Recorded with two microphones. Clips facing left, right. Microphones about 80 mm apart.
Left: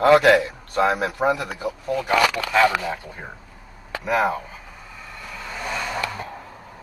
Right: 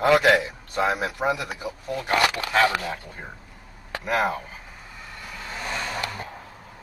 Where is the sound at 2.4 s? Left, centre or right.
Centre.